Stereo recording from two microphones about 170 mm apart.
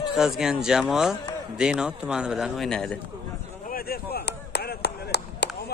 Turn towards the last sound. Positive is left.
turn(degrees=75)  # may be behind; listen again after turning